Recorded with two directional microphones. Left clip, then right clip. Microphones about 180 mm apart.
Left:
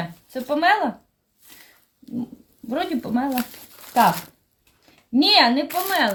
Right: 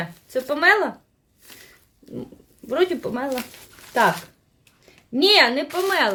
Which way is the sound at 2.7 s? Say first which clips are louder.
Right 3 dB; 40° right (ahead or behind).